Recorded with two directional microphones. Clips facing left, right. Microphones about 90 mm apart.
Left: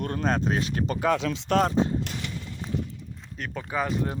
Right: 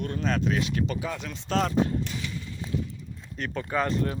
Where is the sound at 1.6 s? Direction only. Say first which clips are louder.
Left 1 dB; 25° left (ahead or behind).